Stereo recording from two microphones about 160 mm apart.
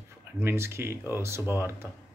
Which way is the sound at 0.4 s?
15° right (ahead or behind).